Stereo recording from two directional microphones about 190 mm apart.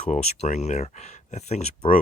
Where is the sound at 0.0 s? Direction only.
35° left (ahead or behind).